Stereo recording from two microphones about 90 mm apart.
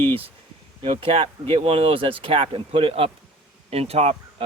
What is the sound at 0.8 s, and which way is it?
Speech, 75° right (ahead or behind).